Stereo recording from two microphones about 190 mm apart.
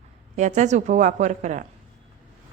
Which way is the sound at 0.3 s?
40° right (ahead or behind).